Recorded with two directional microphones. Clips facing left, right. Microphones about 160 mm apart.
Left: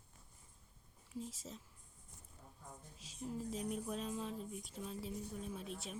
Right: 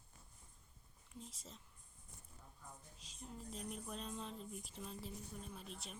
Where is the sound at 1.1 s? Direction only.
Centre (ahead or behind).